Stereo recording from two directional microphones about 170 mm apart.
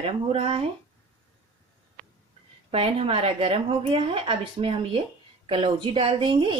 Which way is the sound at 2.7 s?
35° right (ahead or behind).